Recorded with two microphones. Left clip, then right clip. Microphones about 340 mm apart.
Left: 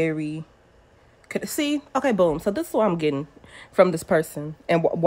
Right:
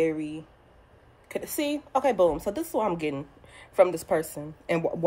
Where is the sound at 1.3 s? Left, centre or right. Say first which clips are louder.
Left 4 dB; left.